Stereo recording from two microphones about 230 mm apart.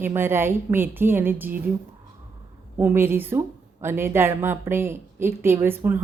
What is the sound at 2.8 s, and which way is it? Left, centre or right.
A woman's voice, centre.